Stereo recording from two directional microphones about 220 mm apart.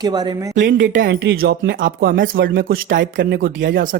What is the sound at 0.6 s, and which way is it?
Speech, 40° right (ahead or behind).